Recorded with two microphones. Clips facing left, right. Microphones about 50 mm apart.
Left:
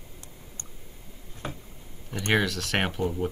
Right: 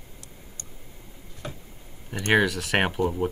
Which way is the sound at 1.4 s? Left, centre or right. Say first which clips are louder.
Left 1 dB; left.